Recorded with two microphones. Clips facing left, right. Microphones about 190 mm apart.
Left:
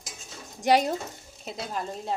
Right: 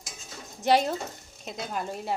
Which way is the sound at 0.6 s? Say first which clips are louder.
Left 1 dB; 15° left (ahead or behind).